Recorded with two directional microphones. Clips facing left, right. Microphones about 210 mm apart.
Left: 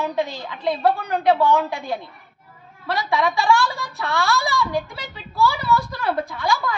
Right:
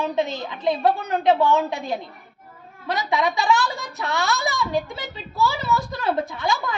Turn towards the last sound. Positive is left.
turn(degrees=-20)  # may be behind; listen again after turning